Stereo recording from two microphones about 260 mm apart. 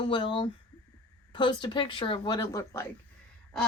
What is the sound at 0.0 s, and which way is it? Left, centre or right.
A woman's voice, centre.